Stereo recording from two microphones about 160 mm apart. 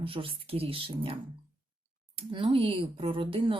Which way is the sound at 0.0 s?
35° right (ahead or behind).